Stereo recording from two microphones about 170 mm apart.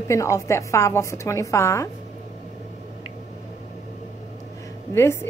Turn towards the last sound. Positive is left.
turn(degrees=15)  # may be behind; listen again after turning